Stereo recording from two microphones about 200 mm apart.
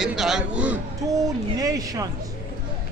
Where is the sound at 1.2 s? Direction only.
20° right (ahead or behind).